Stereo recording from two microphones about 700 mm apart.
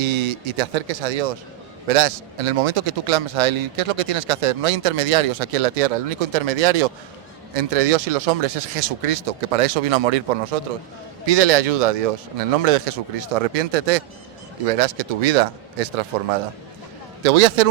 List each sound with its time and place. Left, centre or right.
0.0 s a man's voice: right
17.2 s speech: right